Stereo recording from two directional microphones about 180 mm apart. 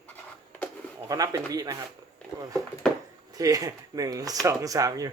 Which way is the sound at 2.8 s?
5° left (ahead or behind).